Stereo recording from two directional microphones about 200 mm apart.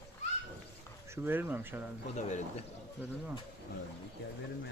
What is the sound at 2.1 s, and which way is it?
Speech, 35° left (ahead or behind).